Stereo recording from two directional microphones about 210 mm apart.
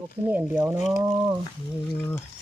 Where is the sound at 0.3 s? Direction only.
10° right (ahead or behind).